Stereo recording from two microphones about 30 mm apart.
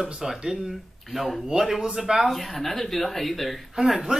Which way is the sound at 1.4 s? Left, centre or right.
Centre.